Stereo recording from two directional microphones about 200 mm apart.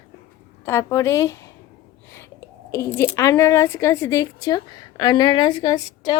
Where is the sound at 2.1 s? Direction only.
15° left (ahead or behind).